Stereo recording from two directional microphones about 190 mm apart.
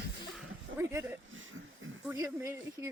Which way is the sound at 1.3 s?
90° right.